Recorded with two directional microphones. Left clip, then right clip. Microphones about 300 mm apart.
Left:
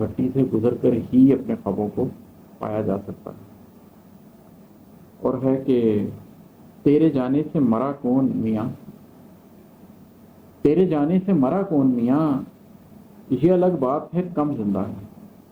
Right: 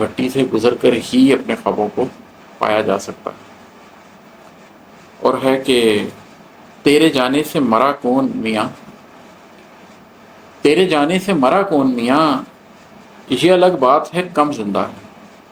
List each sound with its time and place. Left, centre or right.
0.0 s speech: centre
5.2 s speech: centre
10.6 s speech: centre